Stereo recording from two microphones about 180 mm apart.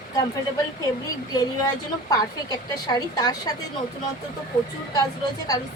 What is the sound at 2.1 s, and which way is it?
A woman's voice, 20° left (ahead or behind).